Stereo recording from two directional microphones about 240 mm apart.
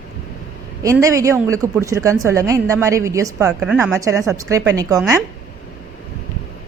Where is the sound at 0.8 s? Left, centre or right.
Centre.